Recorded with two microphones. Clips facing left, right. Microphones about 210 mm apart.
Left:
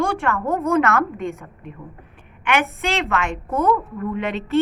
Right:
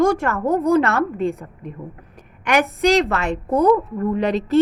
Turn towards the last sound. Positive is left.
turn(degrees=-35)  # may be behind; listen again after turning